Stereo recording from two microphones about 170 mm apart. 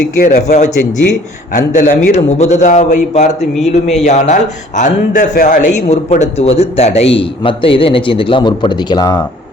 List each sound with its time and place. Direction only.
0.2 s a man's voice: 50° left (ahead or behind)
1.5 s a man's voice: 55° left (ahead or behind); by 9.2 s 20° left (ahead or behind)